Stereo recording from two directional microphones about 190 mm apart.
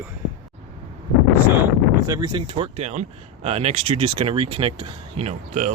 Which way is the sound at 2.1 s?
20° right (ahead or behind).